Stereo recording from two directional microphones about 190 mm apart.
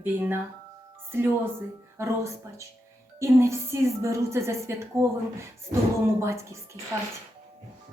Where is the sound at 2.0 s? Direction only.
15° right (ahead or behind).